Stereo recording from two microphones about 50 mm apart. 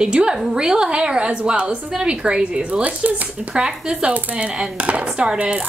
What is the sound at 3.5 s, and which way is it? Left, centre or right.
A woman's voice, centre.